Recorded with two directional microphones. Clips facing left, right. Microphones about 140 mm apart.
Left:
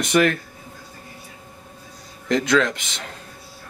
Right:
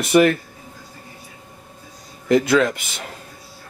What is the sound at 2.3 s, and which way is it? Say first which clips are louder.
Speech: right 3 dB; 5° right (ahead or behind).